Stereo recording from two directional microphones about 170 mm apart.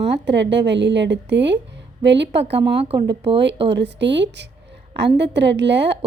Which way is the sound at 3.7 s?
90° right.